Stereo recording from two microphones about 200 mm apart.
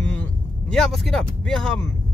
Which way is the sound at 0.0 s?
5° left (ahead or behind).